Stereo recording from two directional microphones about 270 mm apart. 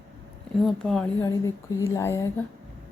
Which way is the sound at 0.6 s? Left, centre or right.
Centre.